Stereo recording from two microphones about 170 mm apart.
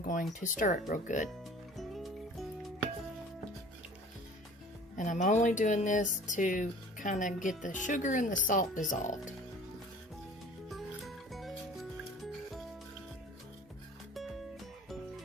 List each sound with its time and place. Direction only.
0.0 s speech: 50° left (ahead or behind)
1.7 s music: centre (ahead or behind)
4.9 s speech: 50° left (ahead or behind)
10.7 s music: centre (ahead or behind)